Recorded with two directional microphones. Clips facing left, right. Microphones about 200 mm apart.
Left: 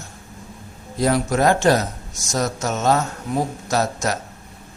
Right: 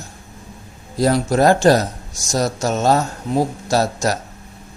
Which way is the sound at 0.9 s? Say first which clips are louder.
Right 3 dB; 35° right (ahead or behind).